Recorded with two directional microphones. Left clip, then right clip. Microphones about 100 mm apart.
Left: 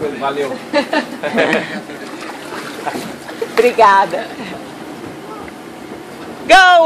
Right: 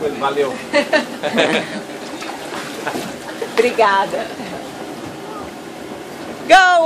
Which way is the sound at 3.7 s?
15° left (ahead or behind).